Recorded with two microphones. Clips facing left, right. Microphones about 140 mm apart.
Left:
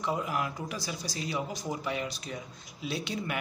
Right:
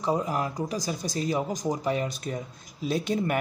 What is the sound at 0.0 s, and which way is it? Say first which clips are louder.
Speech: right 5 dB; 35° right (ahead or behind).